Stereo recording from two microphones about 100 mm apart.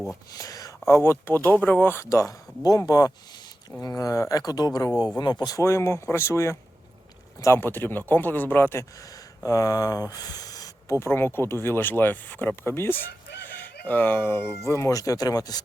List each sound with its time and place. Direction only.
0.3 s a sound: 35° left (ahead or behind)
1.0 s speech: 25° left (ahead or behind); by 5.6 s 40° left (ahead or behind)
5.6 s speech: 25° left (ahead or behind)
9.5 s speech: 35° left (ahead or behind)
11.0 s speech: 25° left (ahead or behind)
13.5 s chicken: 15° left (ahead or behind)
14.7 s speech: 30° left (ahead or behind)